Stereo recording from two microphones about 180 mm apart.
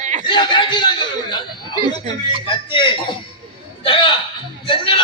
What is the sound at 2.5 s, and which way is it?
A man's voice, 25° left (ahead or behind).